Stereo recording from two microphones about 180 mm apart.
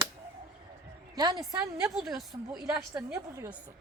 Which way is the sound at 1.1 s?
20° right (ahead or behind).